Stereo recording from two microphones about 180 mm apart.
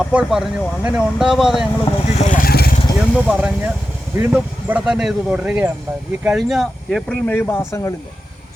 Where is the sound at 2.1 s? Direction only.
40° left (ahead or behind); by 2.7 s 55° left (ahead or behind).